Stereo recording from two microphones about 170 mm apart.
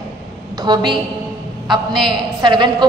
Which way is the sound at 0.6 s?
25° right (ahead or behind).